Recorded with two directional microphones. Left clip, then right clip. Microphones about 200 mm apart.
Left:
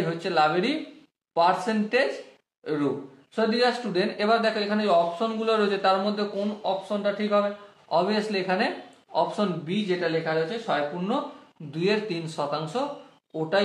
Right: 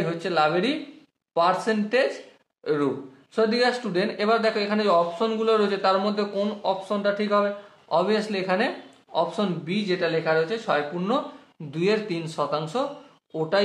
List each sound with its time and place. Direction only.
0.2 s a man's voice: 25° right (ahead or behind)
7.9 s a man's voice: 25° right (ahead or behind)
9.8 s a man's voice: 35° right (ahead or behind)